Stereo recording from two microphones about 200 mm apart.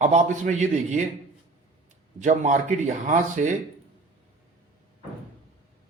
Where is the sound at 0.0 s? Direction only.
35° right (ahead or behind).